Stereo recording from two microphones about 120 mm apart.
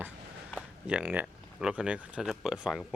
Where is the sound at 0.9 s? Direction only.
10° right (ahead or behind).